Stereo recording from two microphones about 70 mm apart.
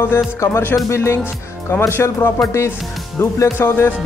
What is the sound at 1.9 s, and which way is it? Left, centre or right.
Music, left.